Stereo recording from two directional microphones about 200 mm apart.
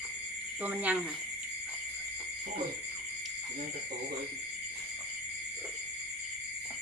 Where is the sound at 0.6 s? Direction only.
5° right (ahead or behind).